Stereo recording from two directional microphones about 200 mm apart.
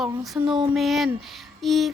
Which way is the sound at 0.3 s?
Centre (ahead or behind).